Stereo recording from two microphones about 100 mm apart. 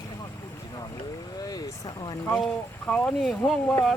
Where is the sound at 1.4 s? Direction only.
40° left (ahead or behind).